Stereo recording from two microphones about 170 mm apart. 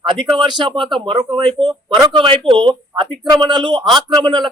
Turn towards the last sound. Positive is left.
turn(degrees=-25)  # may be behind; listen again after turning